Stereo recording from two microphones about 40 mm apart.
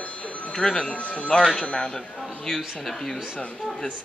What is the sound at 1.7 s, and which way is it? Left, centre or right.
Speech, left.